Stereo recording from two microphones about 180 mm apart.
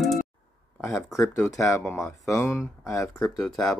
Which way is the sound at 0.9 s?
15° left (ahead or behind).